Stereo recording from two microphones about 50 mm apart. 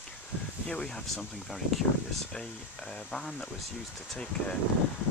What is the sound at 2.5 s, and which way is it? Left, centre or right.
Speech, left.